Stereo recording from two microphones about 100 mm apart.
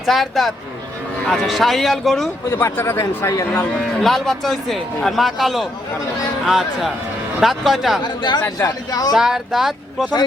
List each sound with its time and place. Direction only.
0.0 s a man's voice: centre (ahead or behind)
2.5 s a man's voice: 25° left (ahead or behind)
4.0 s a man's voice: centre (ahead or behind)
8.0 s speech: 50° left (ahead or behind)
9.1 s a man's voice: 5° right (ahead or behind)